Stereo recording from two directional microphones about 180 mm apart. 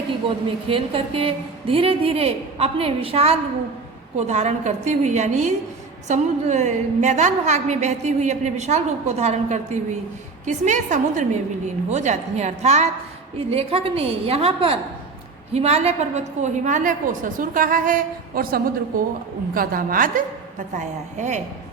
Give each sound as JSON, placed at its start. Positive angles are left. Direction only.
{"t": 0.3, "sound": "a woman's voice", "side_deg": -30}